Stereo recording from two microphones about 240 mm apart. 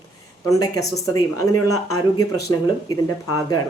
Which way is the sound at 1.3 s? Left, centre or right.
Left.